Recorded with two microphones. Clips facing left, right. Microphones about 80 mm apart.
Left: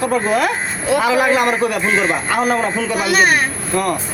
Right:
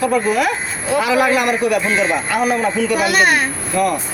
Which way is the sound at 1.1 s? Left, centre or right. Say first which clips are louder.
Right 2 dB; left.